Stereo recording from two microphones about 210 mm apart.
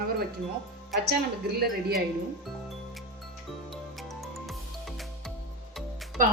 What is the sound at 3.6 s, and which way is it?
Music, centre (ahead or behind).